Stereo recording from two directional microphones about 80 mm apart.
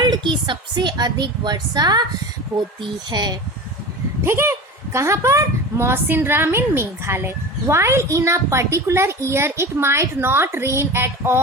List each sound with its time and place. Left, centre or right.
0.0 s a woman's voice: right
3.1 s a woman's voice: right
4.2 s a woman's voice: right